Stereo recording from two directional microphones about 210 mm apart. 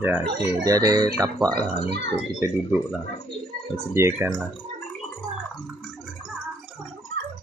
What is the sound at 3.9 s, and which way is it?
Speech, 10° right (ahead or behind).